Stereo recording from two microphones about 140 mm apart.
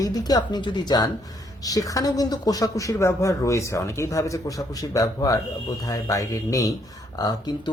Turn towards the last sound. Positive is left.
turn(degrees=30)  # may be behind; listen again after turning